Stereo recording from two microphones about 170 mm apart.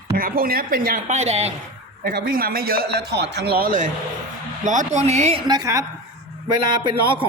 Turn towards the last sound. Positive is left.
turn(degrees=-30)  # may be behind; listen again after turning